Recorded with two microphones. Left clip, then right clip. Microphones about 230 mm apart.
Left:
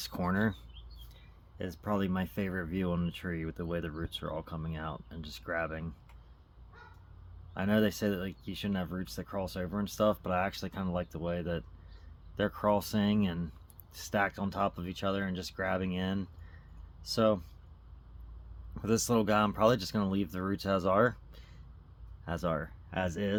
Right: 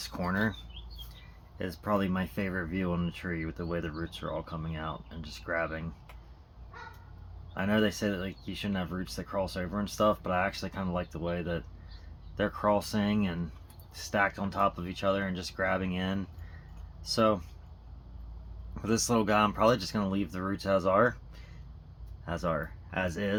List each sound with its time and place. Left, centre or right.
0.0 s speech: left
1.5 s speech: left
7.5 s speech: left
18.7 s speech: left